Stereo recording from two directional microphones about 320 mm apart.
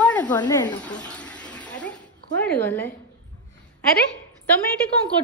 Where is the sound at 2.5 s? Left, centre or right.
Centre.